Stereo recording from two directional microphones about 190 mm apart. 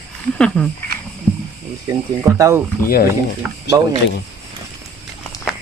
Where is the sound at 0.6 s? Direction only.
5° left (ahead or behind).